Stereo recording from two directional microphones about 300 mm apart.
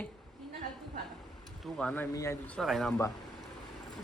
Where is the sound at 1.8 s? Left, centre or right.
Centre.